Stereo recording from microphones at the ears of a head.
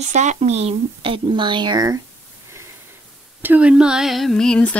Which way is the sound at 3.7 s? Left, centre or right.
Centre.